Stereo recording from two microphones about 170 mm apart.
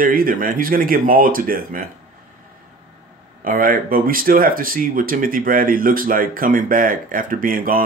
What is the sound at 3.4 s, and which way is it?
Speech, 55° right (ahead or behind).